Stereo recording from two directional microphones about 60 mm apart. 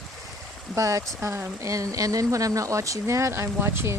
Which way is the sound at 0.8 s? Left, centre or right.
Right.